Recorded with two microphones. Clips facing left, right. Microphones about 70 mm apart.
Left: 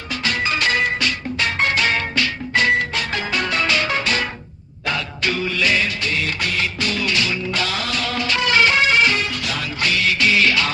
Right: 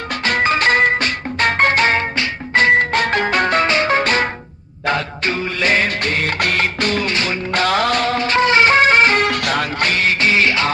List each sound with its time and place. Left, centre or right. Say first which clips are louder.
0.1 s music: right 5 dB; right
9.2 s music: right 7 dB; right